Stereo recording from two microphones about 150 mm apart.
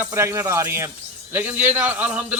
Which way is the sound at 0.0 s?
15° right (ahead or behind).